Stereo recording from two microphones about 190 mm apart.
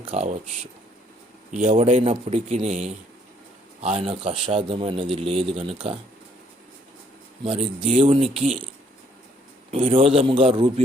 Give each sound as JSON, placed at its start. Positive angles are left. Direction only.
{"t": 0.1, "sound": "a man's voice", "side_deg": -35}
{"t": 1.5, "sound": "a man's voice", "side_deg": -40}
{"t": 7.4, "sound": "speech", "side_deg": -30}
{"t": 9.7, "sound": "speech", "side_deg": -25}